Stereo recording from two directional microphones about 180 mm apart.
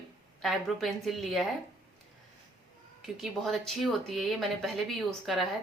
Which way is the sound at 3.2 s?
Centre (ahead or behind).